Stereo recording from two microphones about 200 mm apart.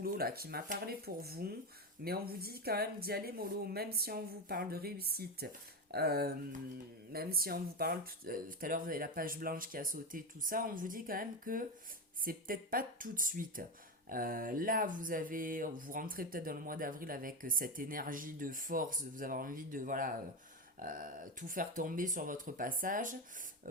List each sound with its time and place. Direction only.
0.0 s speech: 50° right (ahead or behind)